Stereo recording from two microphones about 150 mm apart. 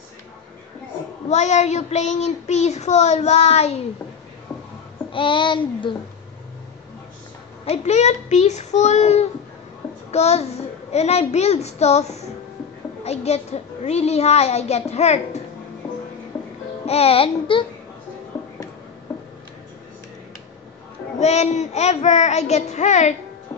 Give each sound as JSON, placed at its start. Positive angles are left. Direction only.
{"t": 1.3, "sound": "child singing", "side_deg": 50}
{"t": 5.1, "sound": "a sound", "side_deg": 35}
{"t": 7.6, "sound": "child singing", "side_deg": 45}
{"t": 16.8, "sound": "a sound", "side_deg": 40}
{"t": 18.3, "sound": "music", "side_deg": 25}
{"t": 21.2, "sound": "child singing", "side_deg": 45}